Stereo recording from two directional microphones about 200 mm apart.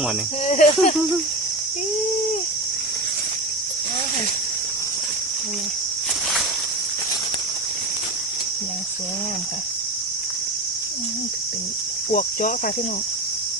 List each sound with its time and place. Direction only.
0.4 s cricket: 35° left (ahead or behind)
12.1 s cricket: 40° left (ahead or behind)